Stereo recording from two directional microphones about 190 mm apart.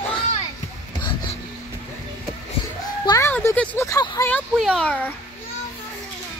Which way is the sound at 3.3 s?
10° left (ahead or behind).